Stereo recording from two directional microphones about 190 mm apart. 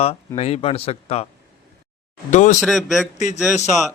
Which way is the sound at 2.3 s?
40° left (ahead or behind).